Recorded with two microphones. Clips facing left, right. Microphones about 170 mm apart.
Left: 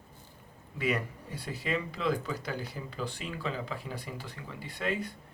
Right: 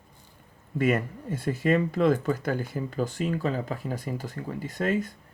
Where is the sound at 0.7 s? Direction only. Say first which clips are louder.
Right 7 dB; 50° right (ahead or behind).